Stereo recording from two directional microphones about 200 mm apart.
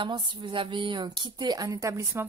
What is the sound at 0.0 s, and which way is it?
A woman's voice, 25° right (ahead or behind).